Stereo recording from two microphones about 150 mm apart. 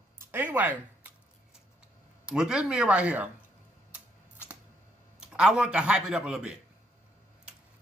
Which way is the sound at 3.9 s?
10° right (ahead or behind).